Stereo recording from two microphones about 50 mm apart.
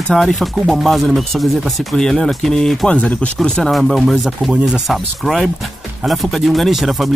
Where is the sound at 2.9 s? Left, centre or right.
Left.